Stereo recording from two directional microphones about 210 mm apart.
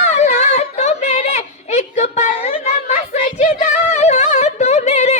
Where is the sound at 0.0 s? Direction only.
35° left (ahead or behind).